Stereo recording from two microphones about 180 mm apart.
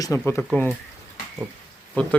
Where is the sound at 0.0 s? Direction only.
15° left (ahead or behind).